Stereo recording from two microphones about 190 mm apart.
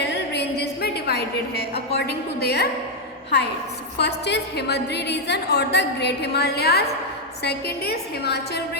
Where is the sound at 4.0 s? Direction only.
65° left (ahead or behind).